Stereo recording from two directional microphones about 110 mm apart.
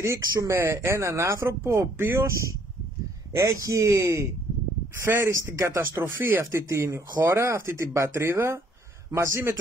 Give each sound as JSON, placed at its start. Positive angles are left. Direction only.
{"t": 0.0, "sound": "speech", "side_deg": -25}